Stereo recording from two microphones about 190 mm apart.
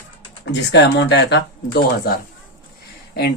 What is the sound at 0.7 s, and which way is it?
Speech, 65° left (ahead or behind).